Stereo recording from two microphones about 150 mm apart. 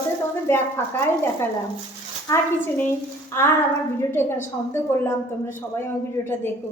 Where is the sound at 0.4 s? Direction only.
15° left (ahead or behind).